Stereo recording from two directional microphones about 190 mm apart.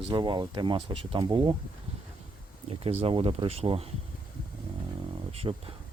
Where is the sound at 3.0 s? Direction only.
30° right (ahead or behind).